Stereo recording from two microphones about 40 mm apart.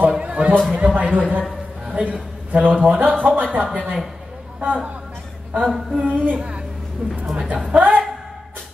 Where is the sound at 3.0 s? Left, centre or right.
Right.